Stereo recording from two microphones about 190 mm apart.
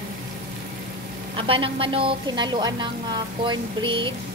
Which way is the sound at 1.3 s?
30° right (ahead or behind).